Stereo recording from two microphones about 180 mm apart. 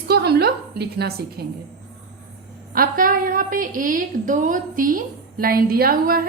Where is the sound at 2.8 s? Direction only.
50° right (ahead or behind).